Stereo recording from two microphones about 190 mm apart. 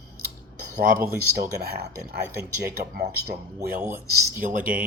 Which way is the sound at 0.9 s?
15° right (ahead or behind).